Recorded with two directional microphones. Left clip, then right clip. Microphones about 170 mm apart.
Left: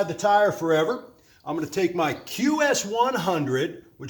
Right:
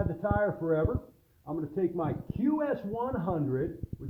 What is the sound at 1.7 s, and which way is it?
Speech, 35° left (ahead or behind).